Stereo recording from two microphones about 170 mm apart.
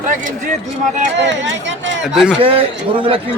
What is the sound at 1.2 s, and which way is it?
Speech, 90° right.